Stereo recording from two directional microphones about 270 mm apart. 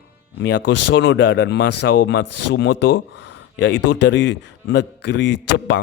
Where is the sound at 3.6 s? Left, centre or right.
Left.